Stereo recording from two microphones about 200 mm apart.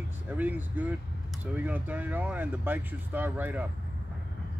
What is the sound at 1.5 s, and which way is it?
Speech, 5° right (ahead or behind).